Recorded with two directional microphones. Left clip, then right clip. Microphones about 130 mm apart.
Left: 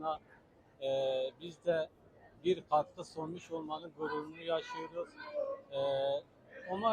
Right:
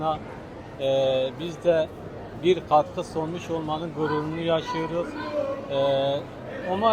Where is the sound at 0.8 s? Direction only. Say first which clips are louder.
Right 11 dB; 25° right (ahead or behind).